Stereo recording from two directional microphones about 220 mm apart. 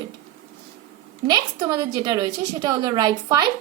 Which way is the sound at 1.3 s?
15° right (ahead or behind).